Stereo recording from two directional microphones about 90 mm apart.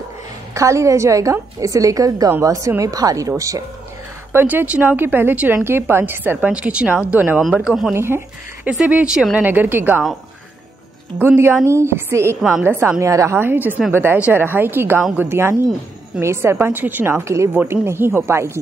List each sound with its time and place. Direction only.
0.6 s a woman's voice: 35° right (ahead or behind)
4.3 s speech: 25° right (ahead or behind)
7.4 s speech: 5° right (ahead or behind)
7.9 s speech: 30° right (ahead or behind)
8.6 s a woman's voice: 15° right (ahead or behind)
11.1 s speech: 25° right (ahead or behind)
12.4 s speech: 5° right (ahead or behind)
12.6 s a woman's voice: 25° right (ahead or behind)
13.4 s speech: 20° right (ahead or behind)